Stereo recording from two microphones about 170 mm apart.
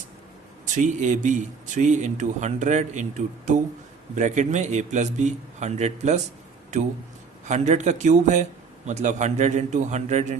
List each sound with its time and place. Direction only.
0.6 s speech: 45° right (ahead or behind)
7.4 s speech: 45° right (ahead or behind)